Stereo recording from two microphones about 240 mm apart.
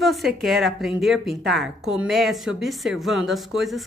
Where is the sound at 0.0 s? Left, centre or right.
Centre.